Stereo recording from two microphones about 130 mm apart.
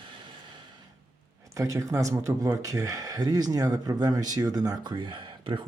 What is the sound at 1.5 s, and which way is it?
Speech, 25° right (ahead or behind).